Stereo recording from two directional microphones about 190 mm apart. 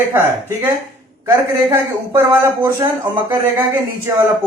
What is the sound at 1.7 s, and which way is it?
Speech, 10° right (ahead or behind).